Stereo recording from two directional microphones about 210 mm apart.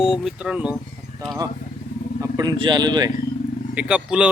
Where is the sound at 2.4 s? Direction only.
20° right (ahead or behind).